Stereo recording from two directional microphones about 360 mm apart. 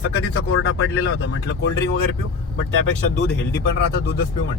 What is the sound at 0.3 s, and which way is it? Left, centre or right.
Speech, left.